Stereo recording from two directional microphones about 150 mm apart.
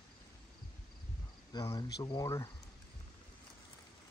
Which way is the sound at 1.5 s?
25° left (ahead or behind).